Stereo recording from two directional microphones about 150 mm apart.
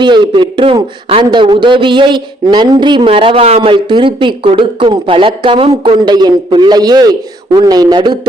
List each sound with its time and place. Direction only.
0.0 s a man's voice: 30° right (ahead or behind)